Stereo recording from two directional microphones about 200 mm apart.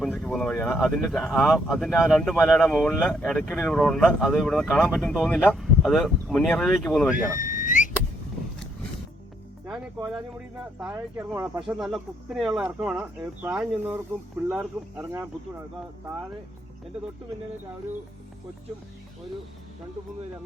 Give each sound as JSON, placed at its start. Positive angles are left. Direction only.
{"t": 0.0, "sound": "speech", "side_deg": 0}
{"t": 7.2, "sound": "a sound", "side_deg": 40}
{"t": 11.2, "sound": "speech", "side_deg": -5}